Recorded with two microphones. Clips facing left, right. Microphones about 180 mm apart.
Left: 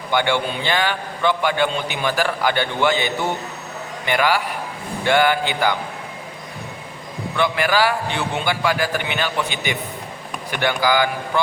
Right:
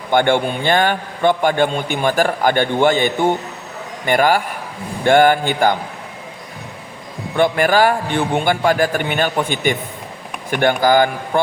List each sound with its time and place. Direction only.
0.1 s a man's voice: 50° right (ahead or behind)
7.3 s a man's voice: 45° right (ahead or behind)